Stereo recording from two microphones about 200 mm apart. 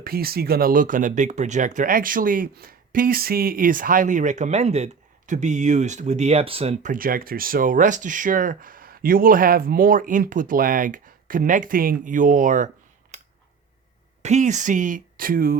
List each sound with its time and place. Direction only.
0.0 s speech: 50° right (ahead or behind)
14.2 s speech: 35° right (ahead or behind)